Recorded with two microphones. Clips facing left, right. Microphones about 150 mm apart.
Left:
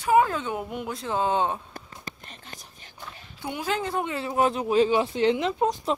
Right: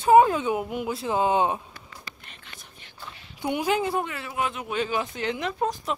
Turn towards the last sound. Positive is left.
turn(degrees=25)  # may be behind; listen again after turning